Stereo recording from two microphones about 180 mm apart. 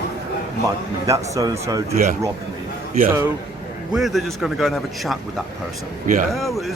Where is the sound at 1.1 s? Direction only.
15° right (ahead or behind).